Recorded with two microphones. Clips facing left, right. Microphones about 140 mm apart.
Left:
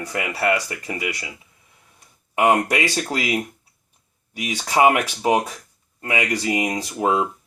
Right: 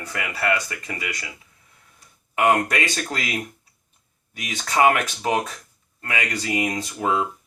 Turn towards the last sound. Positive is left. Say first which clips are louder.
# left 3 dB
turn(degrees=25)  # may be behind; listen again after turning